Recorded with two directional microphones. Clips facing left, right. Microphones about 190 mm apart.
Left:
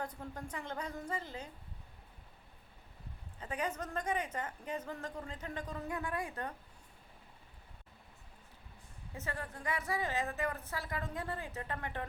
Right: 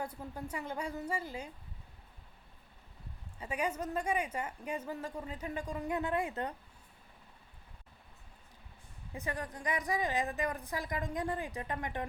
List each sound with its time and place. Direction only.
0.0 s a woman's voice: 10° right (ahead or behind)
3.4 s a woman's voice: 10° right (ahead or behind)
9.1 s a woman's voice: 15° right (ahead or behind)